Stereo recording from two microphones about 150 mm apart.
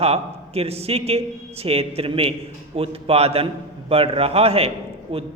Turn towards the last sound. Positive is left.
turn(degrees=-40)  # may be behind; listen again after turning